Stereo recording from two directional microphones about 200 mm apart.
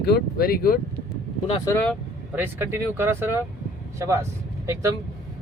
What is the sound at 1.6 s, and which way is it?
Speech, 10° left (ahead or behind).